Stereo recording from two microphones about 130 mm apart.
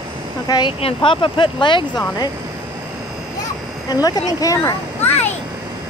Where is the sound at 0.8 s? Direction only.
45° left (ahead or behind).